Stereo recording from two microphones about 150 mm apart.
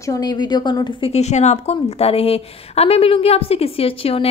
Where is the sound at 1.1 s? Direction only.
50° left (ahead or behind).